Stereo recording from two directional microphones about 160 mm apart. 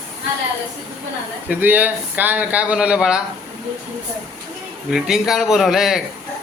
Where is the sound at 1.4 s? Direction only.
10° right (ahead or behind).